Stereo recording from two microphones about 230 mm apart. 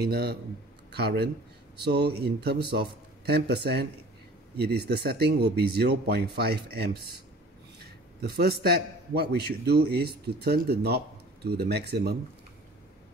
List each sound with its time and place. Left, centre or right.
0.0 s a man's voice: right